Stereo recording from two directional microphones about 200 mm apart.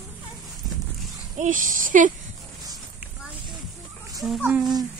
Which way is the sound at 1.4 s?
40° right (ahead or behind).